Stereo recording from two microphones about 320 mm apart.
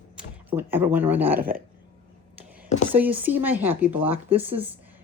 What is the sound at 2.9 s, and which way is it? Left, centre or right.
Speech, centre.